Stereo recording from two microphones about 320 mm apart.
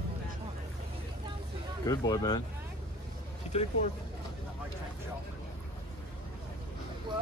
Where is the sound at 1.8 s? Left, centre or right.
Centre.